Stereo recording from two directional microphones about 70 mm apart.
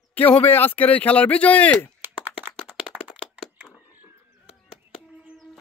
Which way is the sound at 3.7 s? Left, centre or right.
Right.